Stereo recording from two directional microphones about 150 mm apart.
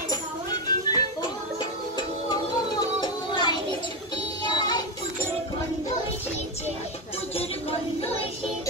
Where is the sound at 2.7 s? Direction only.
30° left (ahead or behind).